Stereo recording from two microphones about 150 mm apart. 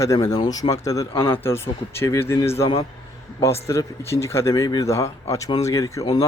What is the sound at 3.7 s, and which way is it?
Speech, 20° left (ahead or behind).